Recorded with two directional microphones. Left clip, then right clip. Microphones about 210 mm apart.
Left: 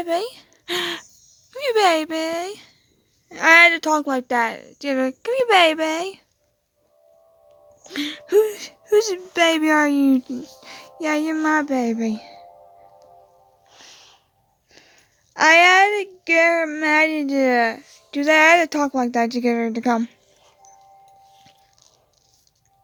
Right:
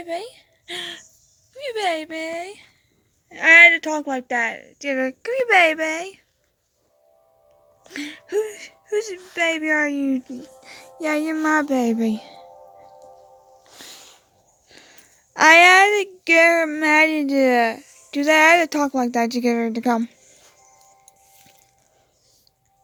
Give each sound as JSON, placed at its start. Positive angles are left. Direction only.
{"t": 0.0, "sound": "speech", "side_deg": 45}
{"t": 3.2, "sound": "a woman's voice", "side_deg": 20}
{"t": 7.9, "sound": "speech", "side_deg": 30}
{"t": 13.7, "sound": "music", "side_deg": -25}
{"t": 14.7, "sound": "speech", "side_deg": -15}